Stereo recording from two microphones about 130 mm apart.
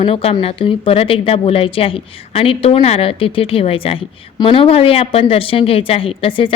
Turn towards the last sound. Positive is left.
turn(degrees=45)  # may be behind; listen again after turning